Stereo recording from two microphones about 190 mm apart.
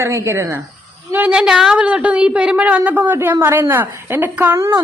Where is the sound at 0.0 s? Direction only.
15° right (ahead or behind).